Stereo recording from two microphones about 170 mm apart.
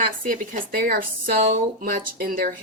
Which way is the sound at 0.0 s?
55° right (ahead or behind).